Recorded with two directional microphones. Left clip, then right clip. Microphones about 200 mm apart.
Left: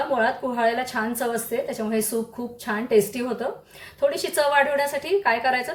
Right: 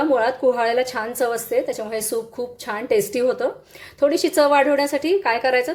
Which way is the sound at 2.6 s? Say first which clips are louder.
Even; 35° right (ahead or behind).